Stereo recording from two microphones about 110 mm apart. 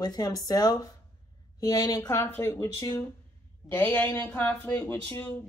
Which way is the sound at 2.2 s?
20° left (ahead or behind).